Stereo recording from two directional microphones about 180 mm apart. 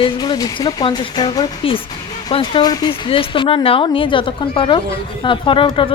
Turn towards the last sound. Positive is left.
turn(degrees=30)  # may be behind; listen again after turning